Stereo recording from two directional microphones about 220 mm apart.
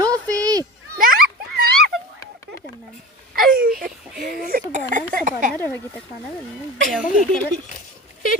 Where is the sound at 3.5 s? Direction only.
40° right (ahead or behind).